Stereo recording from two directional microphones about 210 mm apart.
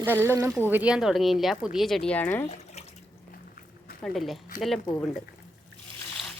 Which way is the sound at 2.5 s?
30° left (ahead or behind).